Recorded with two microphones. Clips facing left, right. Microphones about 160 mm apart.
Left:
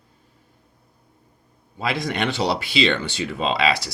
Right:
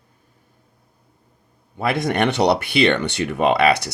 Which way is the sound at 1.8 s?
60° right (ahead or behind).